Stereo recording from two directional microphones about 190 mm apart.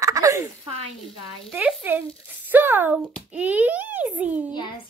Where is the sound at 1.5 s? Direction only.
5° right (ahead or behind).